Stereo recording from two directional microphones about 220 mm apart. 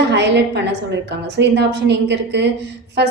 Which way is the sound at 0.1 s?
50° right (ahead or behind).